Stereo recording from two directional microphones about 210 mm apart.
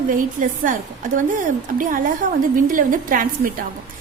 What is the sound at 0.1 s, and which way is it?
A woman's voice, 40° right (ahead or behind).